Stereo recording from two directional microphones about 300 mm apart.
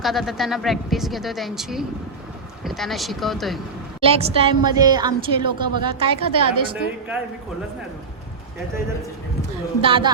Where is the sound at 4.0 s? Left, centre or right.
Centre.